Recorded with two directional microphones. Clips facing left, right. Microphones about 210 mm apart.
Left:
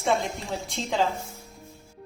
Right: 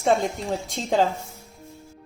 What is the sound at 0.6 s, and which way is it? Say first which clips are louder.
Speech: right 4 dB; 45° right (ahead or behind).